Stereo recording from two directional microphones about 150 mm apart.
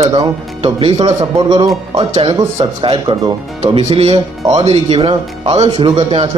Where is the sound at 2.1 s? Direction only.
40° right (ahead or behind).